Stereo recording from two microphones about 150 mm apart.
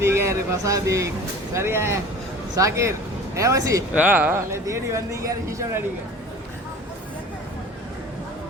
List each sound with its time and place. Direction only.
0.0 s speech: 20° right (ahead or behind)
3.9 s speech: 10° right (ahead or behind)